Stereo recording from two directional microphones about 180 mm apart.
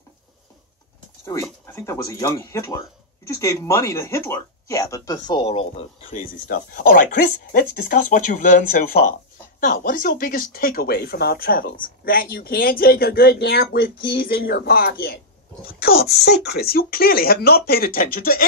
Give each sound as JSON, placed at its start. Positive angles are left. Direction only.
{"t": 1.2, "sound": "speech", "side_deg": 15}
{"t": 6.1, "sound": "speech", "side_deg": 50}